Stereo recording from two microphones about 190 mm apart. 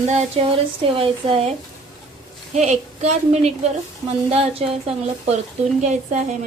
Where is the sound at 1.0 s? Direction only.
30° right (ahead or behind).